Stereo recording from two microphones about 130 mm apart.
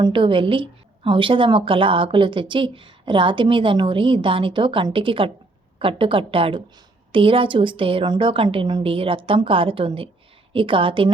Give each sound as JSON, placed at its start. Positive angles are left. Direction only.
{"t": 0.0, "sound": "a woman's voice", "side_deg": -40}